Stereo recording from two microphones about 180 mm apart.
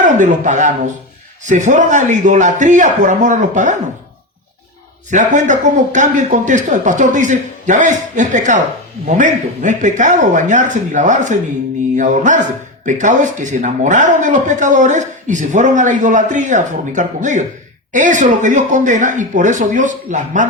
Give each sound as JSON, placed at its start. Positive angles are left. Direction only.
{"t": 0.0, "sound": "speech", "side_deg": -45}
{"t": 5.1, "sound": "speech", "side_deg": -45}